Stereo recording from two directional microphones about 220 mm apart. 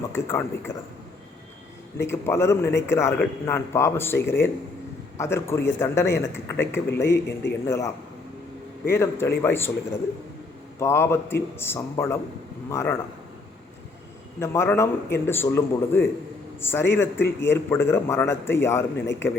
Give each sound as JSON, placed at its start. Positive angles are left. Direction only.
{"t": 0.1, "sound": "speech", "side_deg": 10}
{"t": 2.0, "sound": "speech", "side_deg": 10}
{"t": 10.8, "sound": "speech", "side_deg": 10}
{"t": 14.3, "sound": "speech", "side_deg": 10}